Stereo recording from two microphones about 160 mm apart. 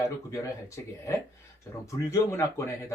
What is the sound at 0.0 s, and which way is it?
Speech, 20° left (ahead or behind).